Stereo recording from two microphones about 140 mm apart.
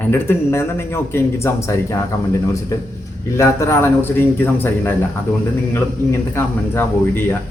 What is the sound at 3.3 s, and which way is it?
Speech, 20° left (ahead or behind).